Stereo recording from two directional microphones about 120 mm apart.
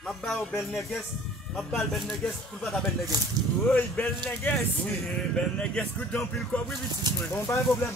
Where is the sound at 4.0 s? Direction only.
15° left (ahead or behind).